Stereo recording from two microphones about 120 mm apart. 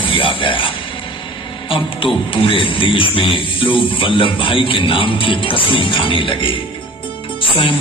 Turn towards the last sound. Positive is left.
turn(degrees=50)  # may be behind; listen again after turning